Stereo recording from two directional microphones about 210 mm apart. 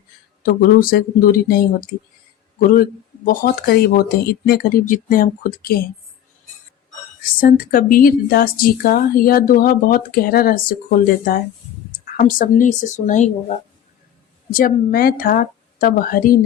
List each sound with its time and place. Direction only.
0.4 s speech: 45° left (ahead or behind)
3.2 s speech: 45° left (ahead or behind)
7.2 s speech: 40° left (ahead or behind)
14.5 s speech: 40° left (ahead or behind)